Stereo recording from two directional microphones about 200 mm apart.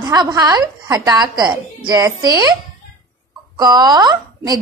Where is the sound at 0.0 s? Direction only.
20° right (ahead or behind).